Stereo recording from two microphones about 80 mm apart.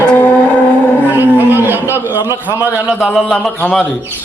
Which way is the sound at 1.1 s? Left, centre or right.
Right.